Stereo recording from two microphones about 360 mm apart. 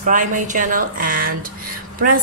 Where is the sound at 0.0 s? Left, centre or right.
Right.